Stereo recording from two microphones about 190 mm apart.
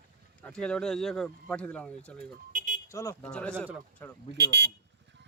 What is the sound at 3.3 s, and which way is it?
Speech, 5° left (ahead or behind).